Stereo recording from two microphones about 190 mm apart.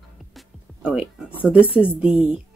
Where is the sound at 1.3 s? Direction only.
5° right (ahead or behind).